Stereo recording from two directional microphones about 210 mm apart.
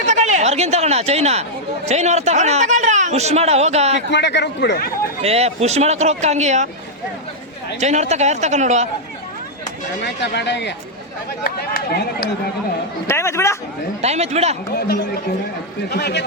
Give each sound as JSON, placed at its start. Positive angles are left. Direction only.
{"t": 0.1, "sound": "a man's voice", "side_deg": -35}
{"t": 3.9, "sound": "a man's voice", "side_deg": 55}
{"t": 5.2, "sound": "a man's voice", "side_deg": -30}
{"t": 7.8, "sound": "a man's voice", "side_deg": -35}
{"t": 10.0, "sound": "a man's voice", "side_deg": 55}
{"t": 13.1, "sound": "speech", "side_deg": 15}
{"t": 14.0, "sound": "a man's voice", "side_deg": -30}
{"t": 14.8, "sound": "a man's voice", "side_deg": 50}